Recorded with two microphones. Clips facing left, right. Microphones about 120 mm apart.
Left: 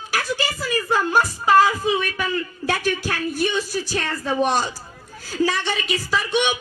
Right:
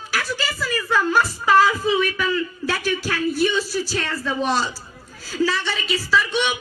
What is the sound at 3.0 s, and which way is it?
Music, 15° left (ahead or behind).